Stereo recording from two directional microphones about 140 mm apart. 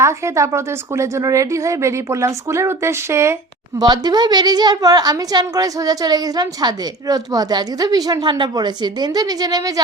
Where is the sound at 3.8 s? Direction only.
30° right (ahead or behind).